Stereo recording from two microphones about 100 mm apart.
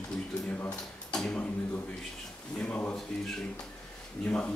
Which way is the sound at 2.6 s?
15° left (ahead or behind).